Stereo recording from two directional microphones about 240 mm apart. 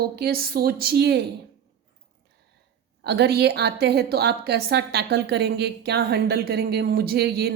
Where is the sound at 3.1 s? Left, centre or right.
Right.